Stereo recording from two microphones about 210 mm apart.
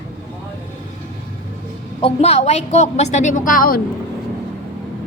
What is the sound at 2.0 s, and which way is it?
A woman's voice, 30° left (ahead or behind).